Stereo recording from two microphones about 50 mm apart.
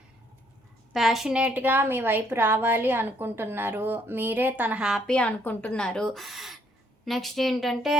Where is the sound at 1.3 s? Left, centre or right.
Right.